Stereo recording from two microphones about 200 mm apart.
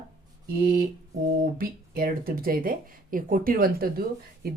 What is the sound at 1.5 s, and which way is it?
Speech, 45° right (ahead or behind).